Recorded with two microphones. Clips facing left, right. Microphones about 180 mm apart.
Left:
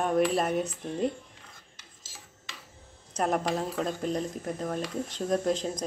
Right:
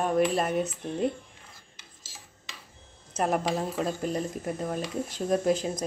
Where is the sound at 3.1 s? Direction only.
5° right (ahead or behind).